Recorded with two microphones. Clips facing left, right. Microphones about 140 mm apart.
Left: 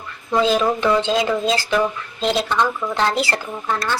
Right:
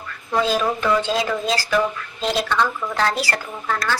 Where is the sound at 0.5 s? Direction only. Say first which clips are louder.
Left 2 dB; 20° left (ahead or behind).